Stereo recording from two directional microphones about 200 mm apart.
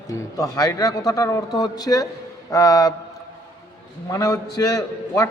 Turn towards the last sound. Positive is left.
turn(degrees=15)  # may be behind; listen again after turning